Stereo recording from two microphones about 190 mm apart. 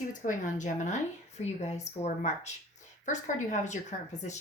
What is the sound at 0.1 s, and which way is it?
Speech, 40° left (ahead or behind).